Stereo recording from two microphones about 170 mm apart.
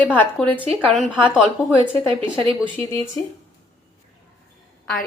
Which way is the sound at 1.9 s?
30° right (ahead or behind).